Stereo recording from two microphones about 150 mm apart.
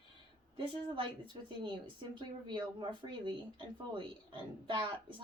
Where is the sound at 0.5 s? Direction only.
35° right (ahead or behind).